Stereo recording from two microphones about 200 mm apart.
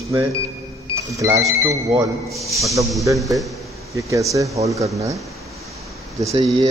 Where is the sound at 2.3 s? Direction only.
Centre (ahead or behind).